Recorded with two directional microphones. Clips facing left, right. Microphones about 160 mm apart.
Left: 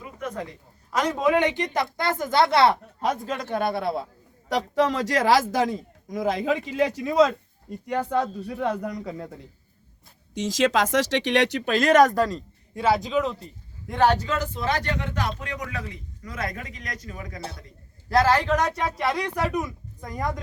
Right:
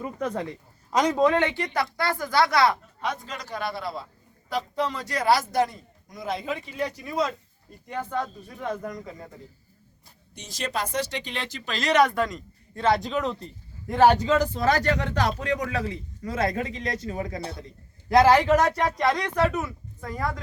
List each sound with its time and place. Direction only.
0.0 s speech: 35° right (ahead or behind)
1.2 s speech: 15° left (ahead or behind)
3.0 s a man's voice: 45° left (ahead or behind)
4.4 s a man's voice: 80° left
7.9 s a man's voice: 75° left (ahead or behind)
10.3 s speech: 90° left; by 12.4 s 35° left (ahead or behind)
12.7 s a man's voice: 5° left (ahead or behind)
14.2 s speech: 30° right (ahead or behind)
18.1 s speech: 15° right (ahead or behind); by 20.4 s 20° left (ahead or behind)